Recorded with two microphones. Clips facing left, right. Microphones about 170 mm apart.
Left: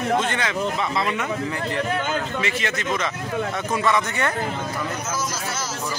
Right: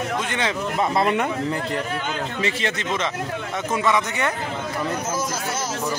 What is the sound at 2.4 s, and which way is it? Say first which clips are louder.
Speech: right 1 dB; 30° right (ahead or behind).